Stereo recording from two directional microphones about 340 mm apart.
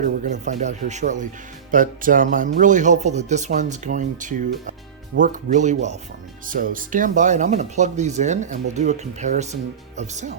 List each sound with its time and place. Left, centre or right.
0.0 s speech: right